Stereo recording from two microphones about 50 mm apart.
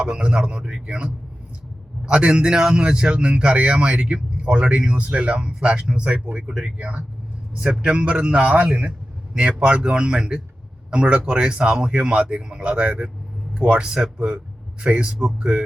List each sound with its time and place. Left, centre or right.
0.0 s speech: centre
2.0 s speech: centre
9.6 s speech: centre